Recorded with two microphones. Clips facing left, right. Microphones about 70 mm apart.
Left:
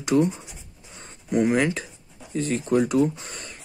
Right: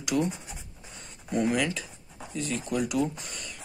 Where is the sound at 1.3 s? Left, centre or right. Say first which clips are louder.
Left 5 dB; left.